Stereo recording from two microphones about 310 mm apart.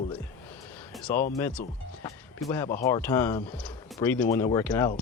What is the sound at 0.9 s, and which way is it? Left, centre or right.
Music, centre.